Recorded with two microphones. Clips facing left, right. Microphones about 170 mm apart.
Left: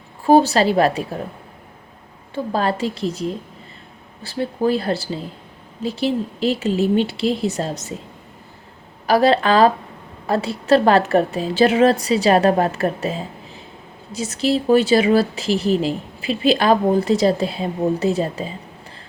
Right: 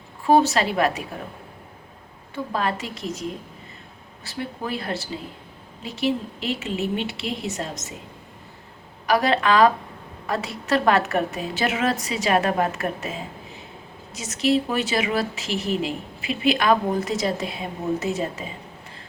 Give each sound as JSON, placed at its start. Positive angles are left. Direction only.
{"t": 0.3, "sound": "speech", "side_deg": 35}
{"t": 2.3, "sound": "speech", "side_deg": 30}
{"t": 4.3, "sound": "speech", "side_deg": 35}
{"t": 9.0, "sound": "speech", "side_deg": 30}